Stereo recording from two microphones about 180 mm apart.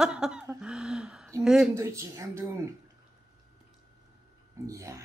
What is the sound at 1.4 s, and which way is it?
Speech, 5° right (ahead or behind).